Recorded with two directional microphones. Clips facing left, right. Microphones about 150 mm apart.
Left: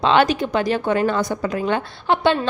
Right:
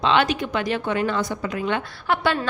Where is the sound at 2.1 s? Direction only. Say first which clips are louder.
Left 4 dB; 25° left (ahead or behind).